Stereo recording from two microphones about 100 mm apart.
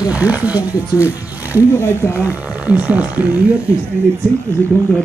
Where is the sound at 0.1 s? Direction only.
15° right (ahead or behind).